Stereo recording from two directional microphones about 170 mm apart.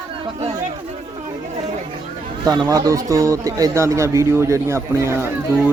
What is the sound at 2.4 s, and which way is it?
A man's voice, 20° right (ahead or behind).